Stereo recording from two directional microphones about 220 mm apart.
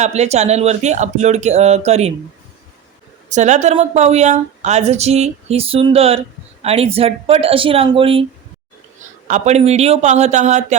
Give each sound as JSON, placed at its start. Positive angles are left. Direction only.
{"t": 0.0, "sound": "speech", "side_deg": -30}
{"t": 3.2, "sound": "a woman's voice", "side_deg": -35}
{"t": 9.2, "sound": "speech", "side_deg": -30}